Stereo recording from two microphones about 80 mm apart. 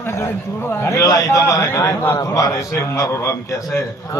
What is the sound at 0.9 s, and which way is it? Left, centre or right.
A man's voice, left.